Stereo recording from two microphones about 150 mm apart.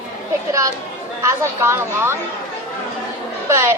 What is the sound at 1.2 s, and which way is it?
Speech, 15° right (ahead or behind).